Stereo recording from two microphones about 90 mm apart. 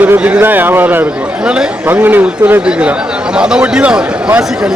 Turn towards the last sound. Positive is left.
turn(degrees=-15)  # may be behind; listen again after turning